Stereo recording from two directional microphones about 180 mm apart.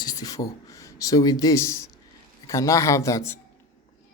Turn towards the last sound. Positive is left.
turn(degrees=15)  # may be behind; listen again after turning